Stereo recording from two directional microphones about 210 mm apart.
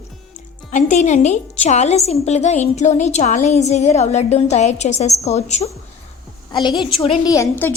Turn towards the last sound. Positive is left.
turn(degrees=10)  # may be behind; listen again after turning